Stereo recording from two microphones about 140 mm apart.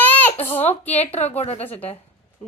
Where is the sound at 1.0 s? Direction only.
50° left (ahead or behind).